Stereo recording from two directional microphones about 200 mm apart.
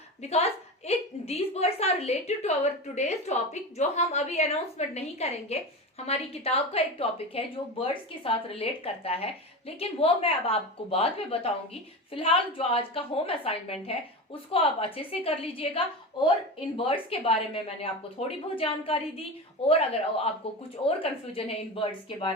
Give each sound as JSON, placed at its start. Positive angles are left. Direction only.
{"t": 0.2, "sound": "a woman's voice", "side_deg": 30}